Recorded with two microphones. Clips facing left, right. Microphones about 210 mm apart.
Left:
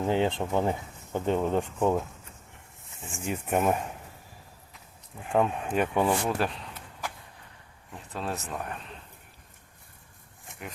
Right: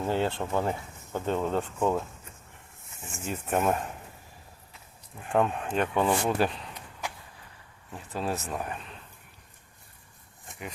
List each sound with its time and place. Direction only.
0.0 s speech: 15° left (ahead or behind)
3.2 s speech: 15° left (ahead or behind)
5.3 s speech: 5° left (ahead or behind)